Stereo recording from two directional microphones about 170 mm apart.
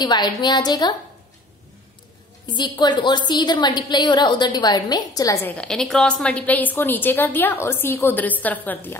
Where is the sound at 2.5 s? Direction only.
25° left (ahead or behind); by 9.0 s 10° left (ahead or behind).